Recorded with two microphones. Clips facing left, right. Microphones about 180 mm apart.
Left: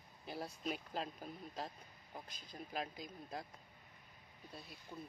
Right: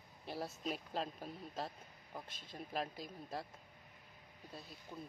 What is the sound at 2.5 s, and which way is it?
Speech, 25° right (ahead or behind).